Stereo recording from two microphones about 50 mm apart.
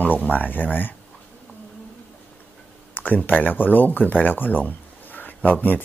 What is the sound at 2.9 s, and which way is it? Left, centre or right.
Speech, left.